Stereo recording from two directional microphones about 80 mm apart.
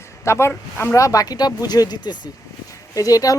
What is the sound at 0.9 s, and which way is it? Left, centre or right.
Speech, left.